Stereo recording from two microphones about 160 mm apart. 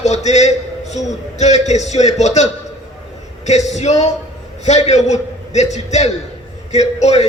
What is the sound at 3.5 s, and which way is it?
A man's voice, 45° left (ahead or behind).